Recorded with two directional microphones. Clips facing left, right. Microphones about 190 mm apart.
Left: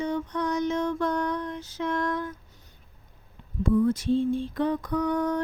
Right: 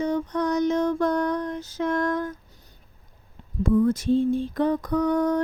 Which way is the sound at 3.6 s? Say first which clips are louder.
Right 2 dB; 45° right (ahead or behind).